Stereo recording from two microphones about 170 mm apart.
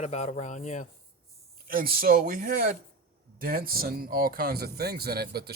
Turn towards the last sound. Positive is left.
turn(degrees=-70)  # may be behind; listen again after turning